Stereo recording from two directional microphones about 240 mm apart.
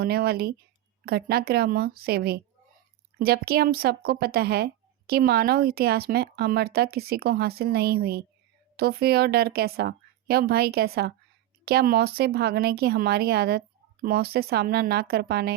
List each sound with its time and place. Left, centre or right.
0.0 s speech: right